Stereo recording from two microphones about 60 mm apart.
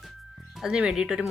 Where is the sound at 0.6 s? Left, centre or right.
Centre.